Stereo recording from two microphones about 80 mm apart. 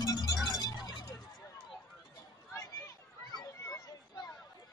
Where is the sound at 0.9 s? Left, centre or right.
Left.